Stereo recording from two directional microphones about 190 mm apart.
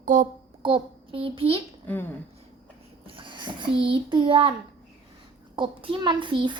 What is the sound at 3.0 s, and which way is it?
A child's voice, 25° right (ahead or behind).